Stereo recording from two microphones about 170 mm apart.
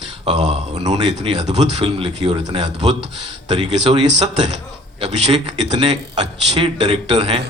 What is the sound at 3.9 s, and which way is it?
Speech, 35° right (ahead or behind).